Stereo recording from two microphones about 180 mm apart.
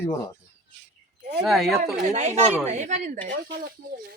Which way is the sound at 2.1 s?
40° right (ahead or behind).